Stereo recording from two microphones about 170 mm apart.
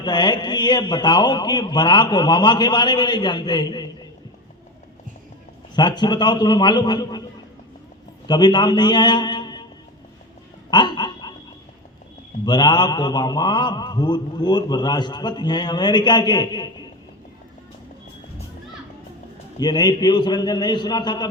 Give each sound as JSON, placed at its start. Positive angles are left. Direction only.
{"t": 0.0, "sound": "mantra", "side_deg": 25}
{"t": 5.7, "sound": "mantra", "side_deg": 25}
{"t": 8.3, "sound": "a man's voice", "side_deg": 25}
{"t": 10.7, "sound": "a sound", "side_deg": 25}
{"t": 12.5, "sound": "mantra", "side_deg": 25}
{"t": 19.5, "sound": "mantra", "side_deg": 25}